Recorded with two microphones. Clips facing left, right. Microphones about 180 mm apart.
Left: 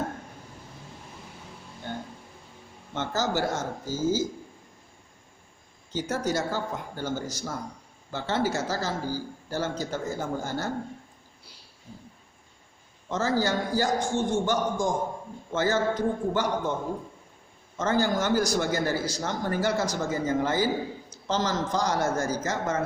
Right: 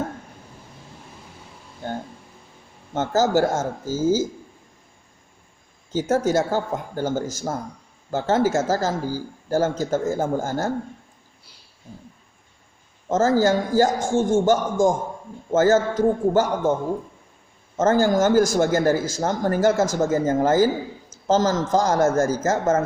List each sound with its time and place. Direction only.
1.8 s a sound: 45° right (ahead or behind)
2.9 s speech: 45° right (ahead or behind)
5.9 s speech: 45° right (ahead or behind)
13.1 s speech: 45° right (ahead or behind)
17.7 s speech: 45° right (ahead or behind)